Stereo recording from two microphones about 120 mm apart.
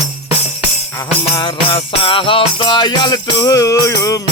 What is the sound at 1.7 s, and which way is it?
Music, 50° left (ahead or behind).